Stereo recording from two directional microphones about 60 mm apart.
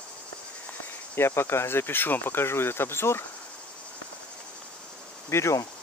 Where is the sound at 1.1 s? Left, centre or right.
Left.